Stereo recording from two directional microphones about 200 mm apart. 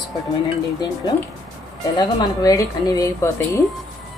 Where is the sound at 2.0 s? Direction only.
15° left (ahead or behind).